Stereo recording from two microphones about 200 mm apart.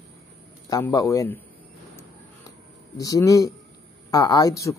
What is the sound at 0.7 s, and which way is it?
Speech, 15° left (ahead or behind).